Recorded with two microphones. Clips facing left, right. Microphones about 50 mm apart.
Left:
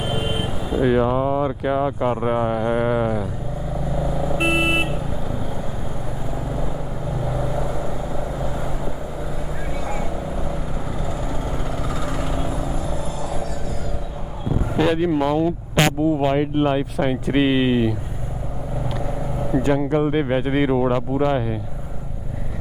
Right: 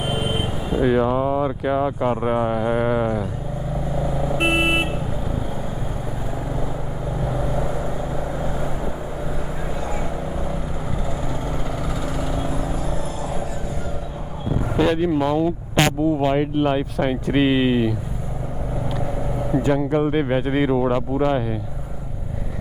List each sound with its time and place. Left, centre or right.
0.0 s a sound: centre
0.4 s speech: centre
3.9 s vehicle: centre
7.2 s vehicle: centre
10.3 s vehicle: centre
12.0 s vehicle: left
14.8 s speech: centre
18.9 s vehicle: centre
19.5 s speech: centre